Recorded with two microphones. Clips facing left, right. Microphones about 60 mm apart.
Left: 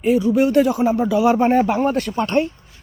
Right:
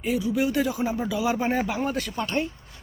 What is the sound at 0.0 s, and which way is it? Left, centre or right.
Speech, left.